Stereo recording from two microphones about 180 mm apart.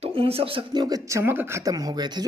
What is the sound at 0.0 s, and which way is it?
A man's voice, 30° right (ahead or behind).